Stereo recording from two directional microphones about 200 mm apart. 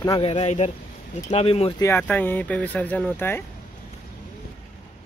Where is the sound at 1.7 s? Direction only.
10° left (ahead or behind).